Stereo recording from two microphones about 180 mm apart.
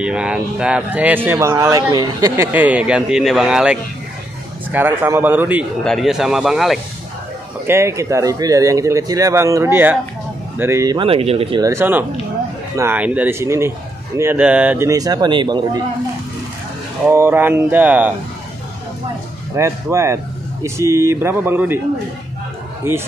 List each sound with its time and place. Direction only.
0.0 s speech: 5° right (ahead or behind)
7.6 s speech: 15° right (ahead or behind); by 11.6 s 30° right (ahead or behind)
11.6 s speech: 15° right (ahead or behind)
14.9 s speech: 20° right (ahead or behind)
17.1 s speech: 10° right (ahead or behind)
19.5 s speech: 15° right (ahead or behind)